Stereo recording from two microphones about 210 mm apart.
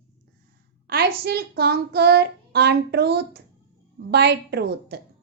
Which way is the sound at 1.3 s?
50° right (ahead or behind).